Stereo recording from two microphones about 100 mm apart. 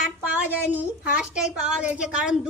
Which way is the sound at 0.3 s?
15° right (ahead or behind).